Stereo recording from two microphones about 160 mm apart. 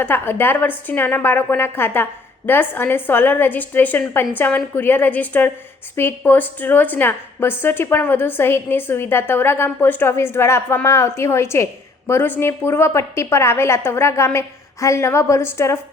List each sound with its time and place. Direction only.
0.0 s a woman's voice: 15° left (ahead or behind)